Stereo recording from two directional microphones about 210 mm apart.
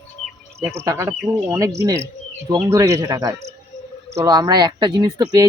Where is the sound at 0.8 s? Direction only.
15° right (ahead or behind).